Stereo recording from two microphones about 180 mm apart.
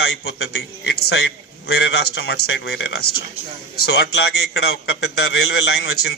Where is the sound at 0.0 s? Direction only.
65° left (ahead or behind).